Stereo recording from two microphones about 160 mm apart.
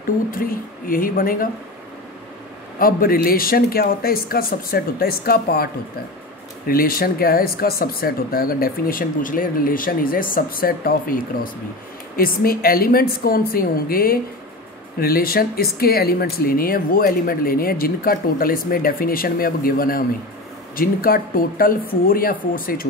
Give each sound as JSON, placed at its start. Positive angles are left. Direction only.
{"t": 0.3, "sound": "speech", "side_deg": 60}
{"t": 2.8, "sound": "speech", "side_deg": 65}
{"t": 6.7, "sound": "speech", "side_deg": 65}
{"t": 12.2, "sound": "speech", "side_deg": 65}